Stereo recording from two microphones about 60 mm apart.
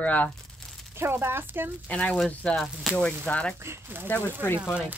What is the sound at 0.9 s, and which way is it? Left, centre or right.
Speech, right.